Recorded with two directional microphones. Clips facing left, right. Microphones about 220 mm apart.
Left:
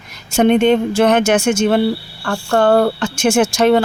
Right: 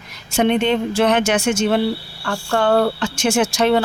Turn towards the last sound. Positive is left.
turn(degrees=45)  # may be behind; listen again after turning